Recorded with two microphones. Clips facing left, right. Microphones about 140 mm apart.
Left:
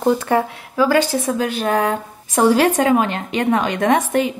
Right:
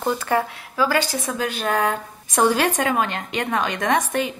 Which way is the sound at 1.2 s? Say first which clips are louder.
Left 5 dB; 30° left (ahead or behind).